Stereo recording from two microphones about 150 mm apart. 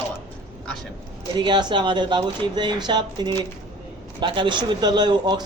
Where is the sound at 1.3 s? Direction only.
30° right (ahead or behind).